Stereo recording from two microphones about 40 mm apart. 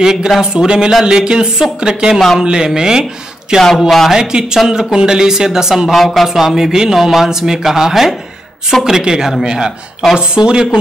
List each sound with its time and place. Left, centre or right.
0.0 s speech: centre
2.1 s speech: centre
2.4 s speech: centre
5.9 s speech: centre
6.2 s speech: centre